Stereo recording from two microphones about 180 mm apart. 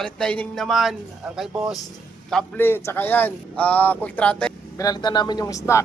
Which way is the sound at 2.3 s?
10° left (ahead or behind).